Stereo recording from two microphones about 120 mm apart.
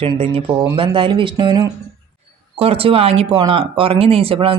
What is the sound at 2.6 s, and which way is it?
Speech, 50° right (ahead or behind).